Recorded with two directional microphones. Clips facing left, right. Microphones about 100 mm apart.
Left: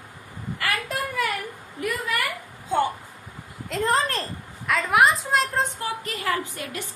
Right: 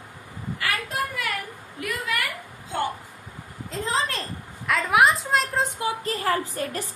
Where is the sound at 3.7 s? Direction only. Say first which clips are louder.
Left 4 dB; 60° left (ahead or behind).